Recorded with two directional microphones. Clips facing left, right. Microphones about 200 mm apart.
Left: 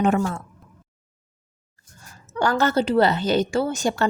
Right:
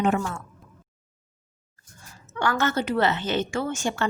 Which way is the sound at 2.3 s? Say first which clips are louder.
Left 4 dB; 35° left (ahead or behind).